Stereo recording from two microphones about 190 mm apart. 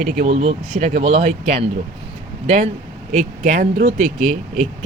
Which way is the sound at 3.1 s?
45° right (ahead or behind).